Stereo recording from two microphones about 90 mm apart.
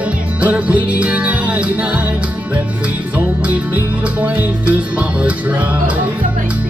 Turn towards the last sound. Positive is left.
turn(degrees=-15)  # may be behind; listen again after turning